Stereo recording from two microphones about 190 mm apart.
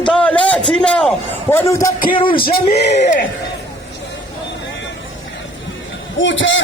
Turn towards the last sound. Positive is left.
turn(degrees=80)